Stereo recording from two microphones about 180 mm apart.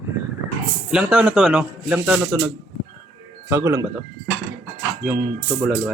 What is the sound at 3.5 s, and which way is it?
Speech, 15° right (ahead or behind).